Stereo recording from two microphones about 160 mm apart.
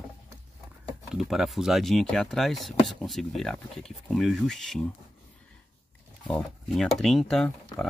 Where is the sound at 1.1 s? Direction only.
Centre (ahead or behind).